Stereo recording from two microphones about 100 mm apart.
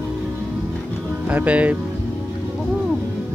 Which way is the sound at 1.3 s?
15° right (ahead or behind).